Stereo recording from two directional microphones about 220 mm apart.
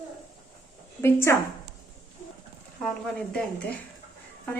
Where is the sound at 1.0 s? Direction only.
10° left (ahead or behind).